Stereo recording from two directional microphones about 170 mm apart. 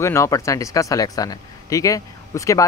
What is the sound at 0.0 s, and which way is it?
Speech, 15° left (ahead or behind).